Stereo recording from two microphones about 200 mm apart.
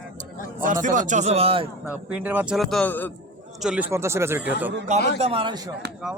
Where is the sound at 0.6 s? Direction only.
40° right (ahead or behind).